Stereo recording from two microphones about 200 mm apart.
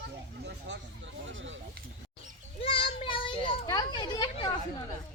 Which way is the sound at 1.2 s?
70° right (ahead or behind).